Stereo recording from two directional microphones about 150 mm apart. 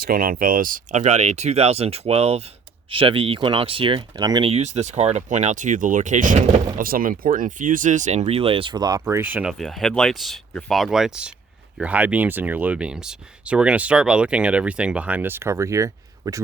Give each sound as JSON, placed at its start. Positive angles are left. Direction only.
{"t": 0.0, "sound": "speech", "side_deg": -75}
{"t": 4.4, "sound": "speech", "side_deg": -45}